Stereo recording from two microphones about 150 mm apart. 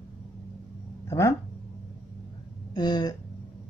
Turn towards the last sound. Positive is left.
turn(degrees=30)  # may be behind; listen again after turning